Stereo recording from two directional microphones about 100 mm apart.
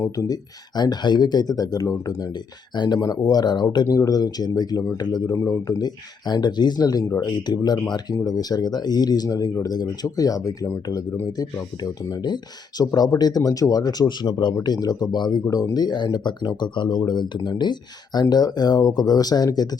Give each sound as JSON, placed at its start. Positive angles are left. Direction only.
{"t": 0.2, "sound": "speech", "side_deg": 35}
{"t": 0.8, "sound": "speech", "side_deg": 45}
{"t": 5.3, "sound": "speech", "side_deg": 30}